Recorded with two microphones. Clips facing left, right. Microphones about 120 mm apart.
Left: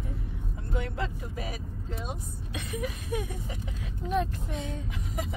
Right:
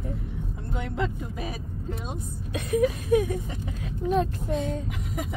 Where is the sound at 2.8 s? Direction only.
55° right (ahead or behind).